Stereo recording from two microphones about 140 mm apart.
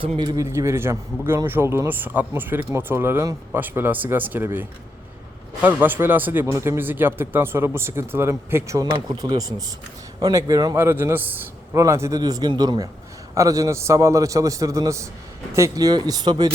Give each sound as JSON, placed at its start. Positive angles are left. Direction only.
{"t": 0.2, "sound": "a man's voice", "side_deg": -30}
{"t": 0.4, "sound": "speech", "side_deg": -20}
{"t": 5.6, "sound": "a man's voice", "side_deg": -15}